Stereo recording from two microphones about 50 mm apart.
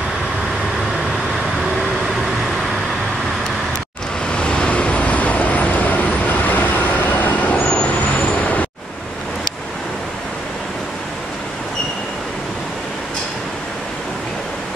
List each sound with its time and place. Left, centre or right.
4.4 s vehicle: centre